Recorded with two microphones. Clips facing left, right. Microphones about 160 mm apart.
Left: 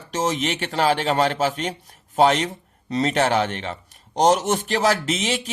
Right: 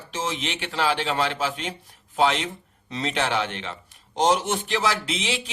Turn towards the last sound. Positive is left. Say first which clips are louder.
# left 4 dB
turn(degrees=45)  # may be behind; listen again after turning